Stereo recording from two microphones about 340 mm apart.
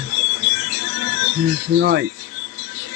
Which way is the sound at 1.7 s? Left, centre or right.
Right.